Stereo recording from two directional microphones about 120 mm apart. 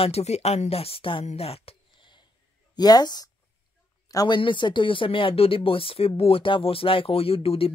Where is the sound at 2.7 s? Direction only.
35° left (ahead or behind); by 7.7 s 50° left (ahead or behind).